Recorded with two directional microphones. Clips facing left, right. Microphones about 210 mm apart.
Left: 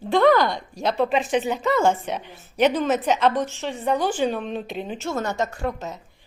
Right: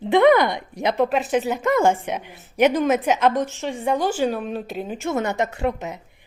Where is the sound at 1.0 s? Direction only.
5° right (ahead or behind).